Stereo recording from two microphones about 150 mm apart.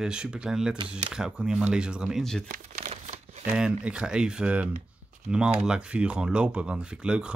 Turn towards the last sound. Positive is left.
turn(degrees=-5)  # may be behind; listen again after turning